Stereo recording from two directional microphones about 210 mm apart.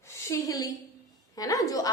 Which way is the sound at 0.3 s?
15° left (ahead or behind).